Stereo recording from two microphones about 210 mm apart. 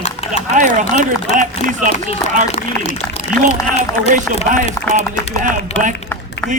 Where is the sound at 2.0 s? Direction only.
35° left (ahead or behind).